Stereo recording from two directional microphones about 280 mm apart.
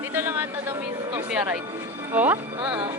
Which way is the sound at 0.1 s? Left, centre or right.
Centre.